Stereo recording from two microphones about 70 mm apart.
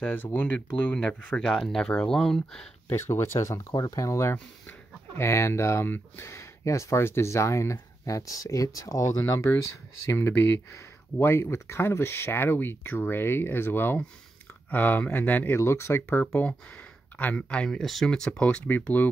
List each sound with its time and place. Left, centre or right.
0.0 s speech: left
2.9 s speech: left
3.7 s speech: left
15.6 s speech: left
16.3 s speech: left
17.6 s speech: centre; by 19.0 s left